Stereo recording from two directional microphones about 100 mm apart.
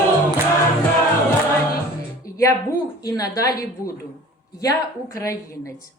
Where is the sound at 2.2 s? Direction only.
35° left (ahead or behind).